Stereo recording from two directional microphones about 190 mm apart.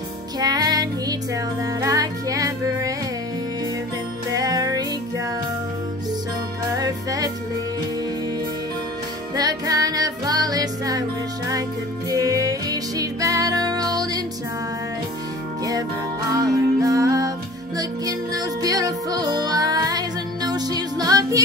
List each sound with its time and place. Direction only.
0.4 s music: 20° right (ahead or behind)
4.3 s music: 20° right (ahead or behind)
6.8 s music: 20° right (ahead or behind)
9.3 s music: 20° right (ahead or behind)
15.6 s music: 20° right (ahead or behind)